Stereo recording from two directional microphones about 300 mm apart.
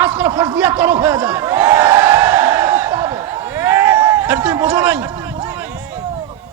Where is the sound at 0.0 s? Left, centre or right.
Centre.